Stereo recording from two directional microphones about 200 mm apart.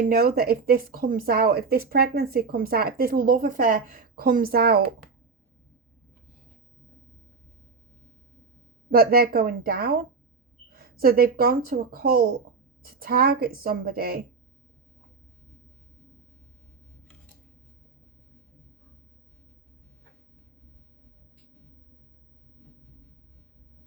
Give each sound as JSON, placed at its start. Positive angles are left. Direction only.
{"t": 0.0, "sound": "speech", "side_deg": -45}
{"t": 8.9, "sound": "speech", "side_deg": -50}